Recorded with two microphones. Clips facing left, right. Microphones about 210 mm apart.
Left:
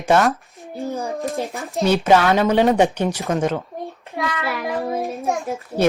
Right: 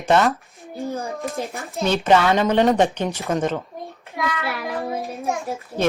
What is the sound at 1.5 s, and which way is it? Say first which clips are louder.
Speech: left 4 dB; 15° left (ahead or behind).